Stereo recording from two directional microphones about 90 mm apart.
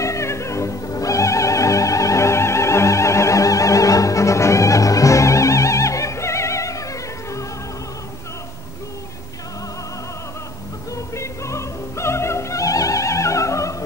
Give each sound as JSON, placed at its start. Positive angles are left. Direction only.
{"t": 0.0, "sound": "music", "side_deg": 35}
{"t": 11.1, "sound": "opera", "side_deg": 35}